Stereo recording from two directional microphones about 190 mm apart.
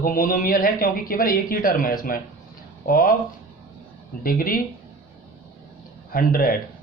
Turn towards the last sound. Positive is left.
turn(degrees=50)  # may be behind; listen again after turning